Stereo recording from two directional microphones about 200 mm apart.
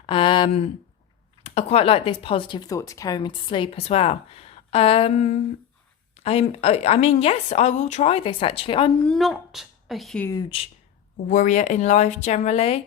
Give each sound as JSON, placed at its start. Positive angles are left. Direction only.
{"t": 0.0, "sound": "a sound", "side_deg": 25}
{"t": 1.5, "sound": "a woman's voice", "side_deg": 30}
{"t": 9.0, "sound": "speech", "side_deg": 0}
{"t": 10.5, "sound": "speech", "side_deg": 25}
{"t": 11.3, "sound": "a woman's voice", "side_deg": 40}